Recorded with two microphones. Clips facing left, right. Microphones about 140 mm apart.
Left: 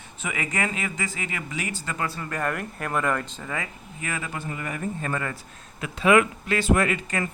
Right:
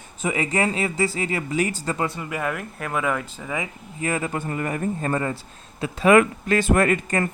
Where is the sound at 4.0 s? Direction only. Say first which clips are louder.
Right 7 dB; 35° right (ahead or behind).